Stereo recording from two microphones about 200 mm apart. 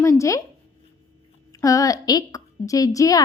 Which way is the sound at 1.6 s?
15° left (ahead or behind).